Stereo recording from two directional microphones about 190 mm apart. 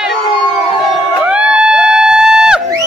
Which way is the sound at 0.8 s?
5° right (ahead or behind).